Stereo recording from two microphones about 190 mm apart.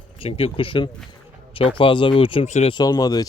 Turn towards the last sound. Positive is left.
turn(degrees=20)  # may be behind; listen again after turning